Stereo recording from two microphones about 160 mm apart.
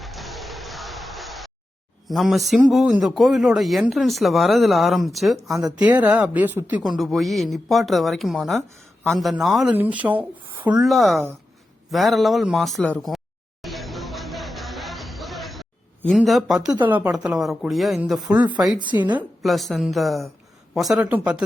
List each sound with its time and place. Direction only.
0.0 s music: centre (ahead or behind)
2.0 s a man's voice: centre (ahead or behind)
10.8 s a man's voice: centre (ahead or behind)
11.9 s a sound: centre (ahead or behind)
16.0 s a man's voice: centre (ahead or behind)
19.4 s a man's voice: centre (ahead or behind)